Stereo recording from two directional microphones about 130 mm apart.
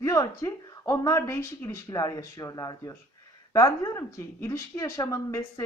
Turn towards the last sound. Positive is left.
turn(degrees=25)  # may be behind; listen again after turning